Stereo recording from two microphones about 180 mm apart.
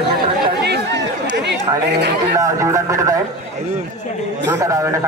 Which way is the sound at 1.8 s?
70° right (ahead or behind).